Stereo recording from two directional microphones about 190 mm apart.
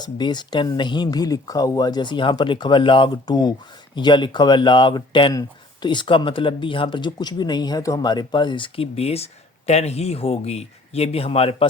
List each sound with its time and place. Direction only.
0.0 s speech: 25° left (ahead or behind)